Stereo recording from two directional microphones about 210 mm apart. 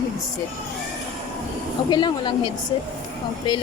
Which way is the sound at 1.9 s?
20° left (ahead or behind).